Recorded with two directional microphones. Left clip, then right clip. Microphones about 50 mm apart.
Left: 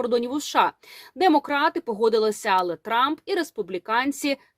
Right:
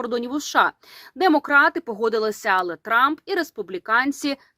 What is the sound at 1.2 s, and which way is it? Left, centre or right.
Speech, right.